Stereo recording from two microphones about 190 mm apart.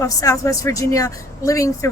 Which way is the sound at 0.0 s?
15° left (ahead or behind).